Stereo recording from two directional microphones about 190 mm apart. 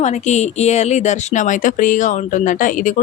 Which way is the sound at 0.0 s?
35° left (ahead or behind).